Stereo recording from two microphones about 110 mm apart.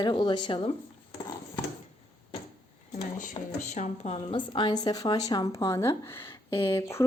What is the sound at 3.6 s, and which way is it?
Speech, 90° left.